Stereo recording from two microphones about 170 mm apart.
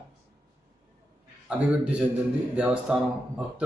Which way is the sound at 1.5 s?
5° right (ahead or behind).